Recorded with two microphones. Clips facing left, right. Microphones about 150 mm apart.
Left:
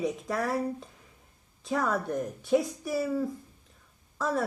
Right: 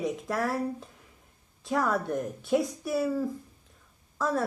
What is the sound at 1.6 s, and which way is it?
A woman's voice, centre (ahead or behind).